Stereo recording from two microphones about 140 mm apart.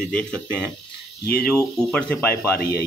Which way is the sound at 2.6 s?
90° left.